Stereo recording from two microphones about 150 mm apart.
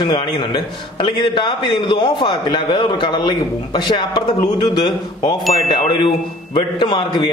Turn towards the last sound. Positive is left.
turn(degrees=30)  # may be behind; listen again after turning